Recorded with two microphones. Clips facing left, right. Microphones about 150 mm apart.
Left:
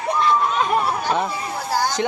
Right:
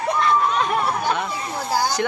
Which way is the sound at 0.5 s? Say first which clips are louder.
Left 1 dB; centre (ahead or behind).